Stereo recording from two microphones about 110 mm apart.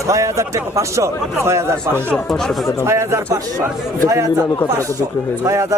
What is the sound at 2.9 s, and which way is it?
Speech, 25° right (ahead or behind).